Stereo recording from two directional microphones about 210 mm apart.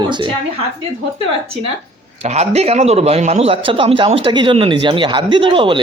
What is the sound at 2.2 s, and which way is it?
A man's voice, 30° right (ahead or behind).